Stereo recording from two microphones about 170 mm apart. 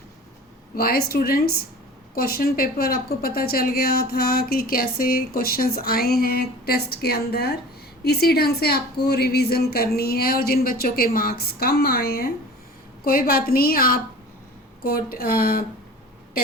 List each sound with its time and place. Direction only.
0.8 s a woman's voice: 65° left (ahead or behind)